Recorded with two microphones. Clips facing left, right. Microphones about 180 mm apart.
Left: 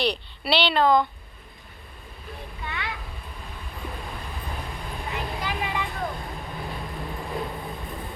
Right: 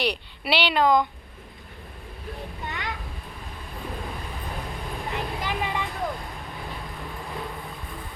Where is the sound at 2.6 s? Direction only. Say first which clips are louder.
Even; 45° right (ahead or behind).